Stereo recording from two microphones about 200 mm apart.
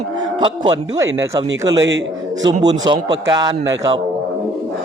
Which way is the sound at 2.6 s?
20° right (ahead or behind).